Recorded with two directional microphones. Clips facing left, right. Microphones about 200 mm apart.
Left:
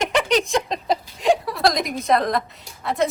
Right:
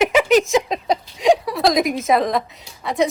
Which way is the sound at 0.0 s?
5° right (ahead or behind).